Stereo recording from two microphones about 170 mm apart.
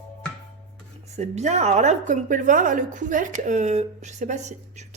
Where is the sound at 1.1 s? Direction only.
40° right (ahead or behind).